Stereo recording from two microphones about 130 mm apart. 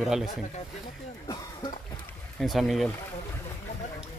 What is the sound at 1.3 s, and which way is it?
Throat clearing, 35° left (ahead or behind).